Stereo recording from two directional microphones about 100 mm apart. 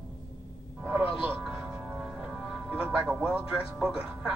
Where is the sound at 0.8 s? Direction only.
20° right (ahead or behind).